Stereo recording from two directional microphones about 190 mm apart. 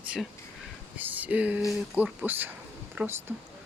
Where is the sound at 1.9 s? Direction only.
5° right (ahead or behind).